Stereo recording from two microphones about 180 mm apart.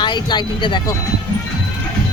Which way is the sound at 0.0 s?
25° left (ahead or behind).